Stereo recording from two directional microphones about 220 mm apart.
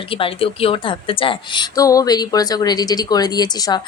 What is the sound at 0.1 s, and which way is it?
A woman's voice, 25° left (ahead or behind).